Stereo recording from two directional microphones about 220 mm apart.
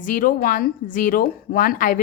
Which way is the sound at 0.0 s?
40° left (ahead or behind).